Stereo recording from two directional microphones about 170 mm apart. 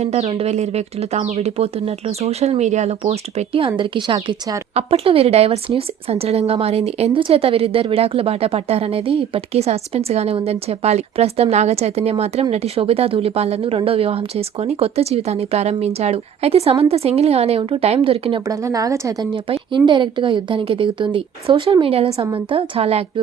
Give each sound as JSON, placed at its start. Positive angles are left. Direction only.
{"t": 0.0, "sound": "a woman's voice", "side_deg": -40}
{"t": 4.7, "sound": "speech", "side_deg": -35}
{"t": 18.4, "sound": "a woman's voice", "side_deg": -20}